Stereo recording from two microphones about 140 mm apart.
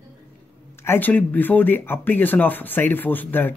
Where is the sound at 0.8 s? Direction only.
15° left (ahead or behind).